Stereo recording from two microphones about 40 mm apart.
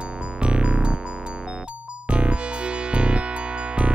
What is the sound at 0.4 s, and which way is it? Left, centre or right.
Music, right.